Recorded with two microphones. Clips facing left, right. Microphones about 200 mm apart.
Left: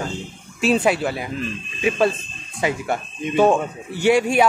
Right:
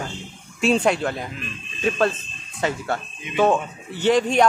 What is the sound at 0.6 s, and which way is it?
A man's voice, 5° left (ahead or behind).